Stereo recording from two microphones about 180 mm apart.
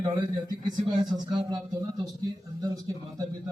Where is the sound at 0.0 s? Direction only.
20° right (ahead or behind).